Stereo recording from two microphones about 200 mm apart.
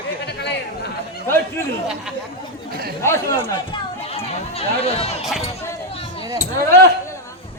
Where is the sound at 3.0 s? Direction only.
10° left (ahead or behind).